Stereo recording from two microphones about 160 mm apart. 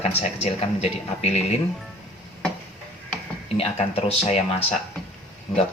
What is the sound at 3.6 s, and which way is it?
Speech, 40° left (ahead or behind).